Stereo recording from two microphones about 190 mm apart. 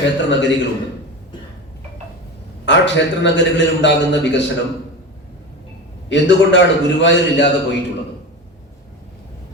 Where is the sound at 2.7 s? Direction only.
70° left (ahead or behind).